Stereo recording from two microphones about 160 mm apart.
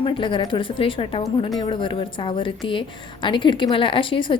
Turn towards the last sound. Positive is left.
turn(degrees=30)  # may be behind; listen again after turning